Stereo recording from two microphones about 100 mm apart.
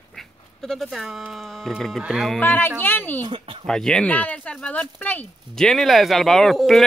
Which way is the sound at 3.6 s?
5° left (ahead or behind).